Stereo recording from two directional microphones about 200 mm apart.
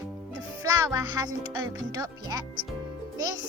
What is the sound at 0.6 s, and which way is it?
Speech, 15° right (ahead or behind).